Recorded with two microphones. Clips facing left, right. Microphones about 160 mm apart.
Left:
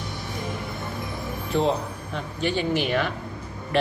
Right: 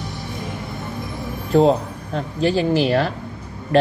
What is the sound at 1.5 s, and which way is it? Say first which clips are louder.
A woman's voice: right 8 dB; 40° right (ahead or behind).